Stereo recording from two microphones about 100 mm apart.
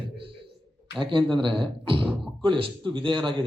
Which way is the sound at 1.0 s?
55° right (ahead or behind).